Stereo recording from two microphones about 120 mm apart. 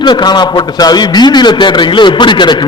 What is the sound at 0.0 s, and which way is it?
A man's voice, 35° left (ahead or behind).